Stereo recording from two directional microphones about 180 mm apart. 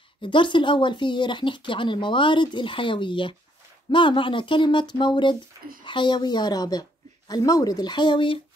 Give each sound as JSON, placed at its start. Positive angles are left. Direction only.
{"t": 0.2, "sound": "speech", "side_deg": 25}